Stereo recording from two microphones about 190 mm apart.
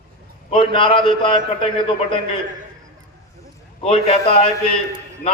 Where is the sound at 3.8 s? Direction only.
30° left (ahead or behind).